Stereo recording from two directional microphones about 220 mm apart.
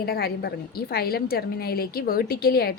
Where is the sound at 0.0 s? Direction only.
45° left (ahead or behind).